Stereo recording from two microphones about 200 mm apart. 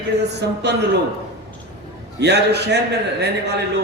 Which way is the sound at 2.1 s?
55° right (ahead or behind).